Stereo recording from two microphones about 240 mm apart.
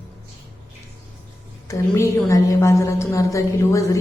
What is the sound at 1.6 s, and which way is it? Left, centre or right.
Music, centre.